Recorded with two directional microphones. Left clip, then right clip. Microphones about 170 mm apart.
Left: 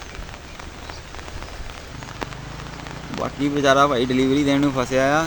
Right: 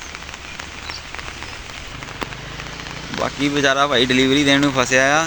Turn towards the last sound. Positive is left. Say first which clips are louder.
# right 4 dB
turn(degrees=5)  # may be behind; listen again after turning